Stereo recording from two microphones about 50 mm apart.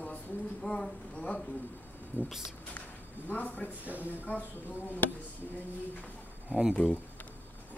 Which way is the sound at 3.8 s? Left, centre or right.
Right.